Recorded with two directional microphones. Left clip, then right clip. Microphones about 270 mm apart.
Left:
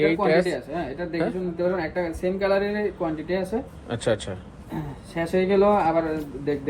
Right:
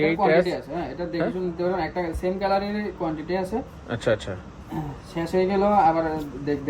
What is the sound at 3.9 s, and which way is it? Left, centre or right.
Speech, centre.